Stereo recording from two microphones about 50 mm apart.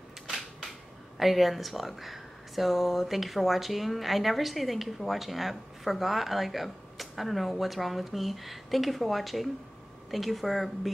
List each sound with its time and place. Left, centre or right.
1.2 s speech: centre